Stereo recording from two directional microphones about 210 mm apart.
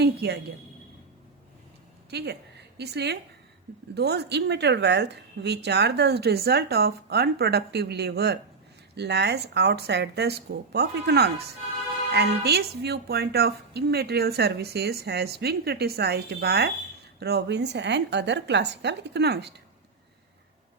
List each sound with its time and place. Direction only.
0.0 s a woman's voice: 50° right (ahead or behind)
2.0 s a woman's voice: 50° right (ahead or behind)